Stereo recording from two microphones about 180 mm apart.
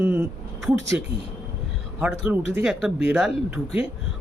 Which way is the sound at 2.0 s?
10° right (ahead or behind).